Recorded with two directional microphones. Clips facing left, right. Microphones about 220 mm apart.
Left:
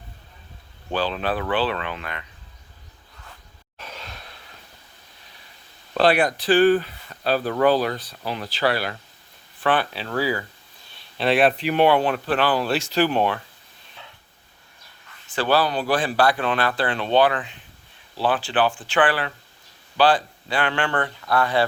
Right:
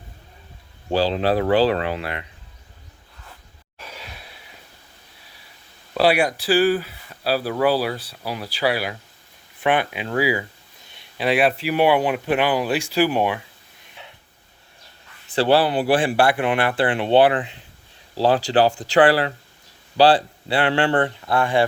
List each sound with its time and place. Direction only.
0.9 s speech: 30° right (ahead or behind)
3.8 s sigh: 10° right (ahead or behind)
5.9 s speech: 10° right (ahead or behind)
15.4 s speech: 25° right (ahead or behind)
16.4 s speech: 15° right (ahead or behind)
18.1 s speech: 40° right (ahead or behind)